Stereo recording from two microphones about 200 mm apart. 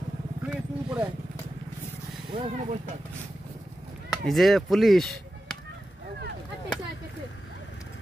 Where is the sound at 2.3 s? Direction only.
35° right (ahead or behind).